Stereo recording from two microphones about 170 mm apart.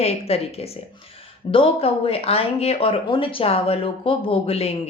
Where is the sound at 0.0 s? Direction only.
35° left (ahead or behind).